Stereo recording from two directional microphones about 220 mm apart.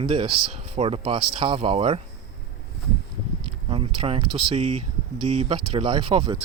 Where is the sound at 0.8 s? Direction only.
25° right (ahead or behind).